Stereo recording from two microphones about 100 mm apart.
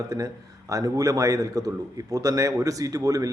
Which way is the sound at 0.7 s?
35° right (ahead or behind).